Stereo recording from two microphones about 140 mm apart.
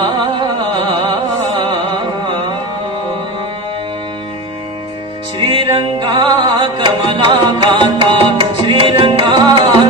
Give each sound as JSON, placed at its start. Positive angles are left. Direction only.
{"t": 0.0, "sound": "music", "side_deg": -35}
{"t": 5.4, "sound": "music", "side_deg": -40}